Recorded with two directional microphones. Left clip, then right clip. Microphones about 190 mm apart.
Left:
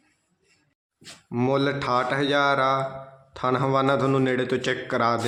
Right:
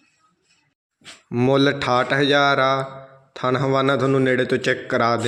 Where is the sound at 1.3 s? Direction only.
15° right (ahead or behind).